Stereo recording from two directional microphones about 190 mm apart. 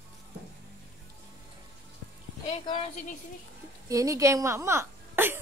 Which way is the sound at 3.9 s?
15° right (ahead or behind).